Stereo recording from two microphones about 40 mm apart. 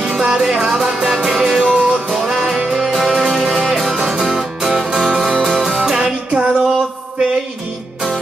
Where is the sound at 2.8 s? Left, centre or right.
Centre.